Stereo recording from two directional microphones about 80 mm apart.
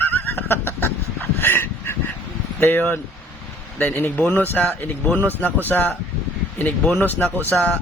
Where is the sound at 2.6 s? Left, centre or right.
Left.